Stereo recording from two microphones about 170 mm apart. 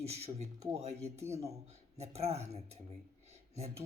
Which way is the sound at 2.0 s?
40° right (ahead or behind).